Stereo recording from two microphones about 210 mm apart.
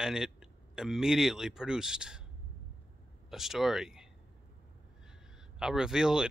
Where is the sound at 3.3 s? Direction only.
Centre (ahead or behind).